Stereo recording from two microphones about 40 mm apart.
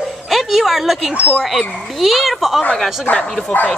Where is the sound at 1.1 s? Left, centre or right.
Right.